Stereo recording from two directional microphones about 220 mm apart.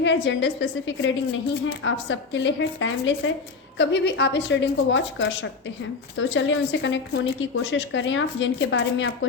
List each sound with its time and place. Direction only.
0.0 s a woman's voice: 55° left (ahead or behind)